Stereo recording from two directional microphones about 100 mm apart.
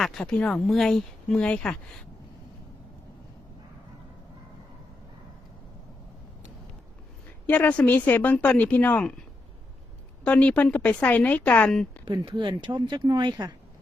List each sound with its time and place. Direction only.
0.0 s speech: 5° left (ahead or behind)
7.4 s speech: 15° left (ahead or behind)
10.2 s speech: 10° left (ahead or behind)
12.0 s speech: 50° right (ahead or behind)